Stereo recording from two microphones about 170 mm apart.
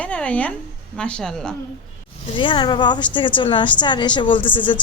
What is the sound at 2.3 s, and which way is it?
A woman's voice, 30° left (ahead or behind).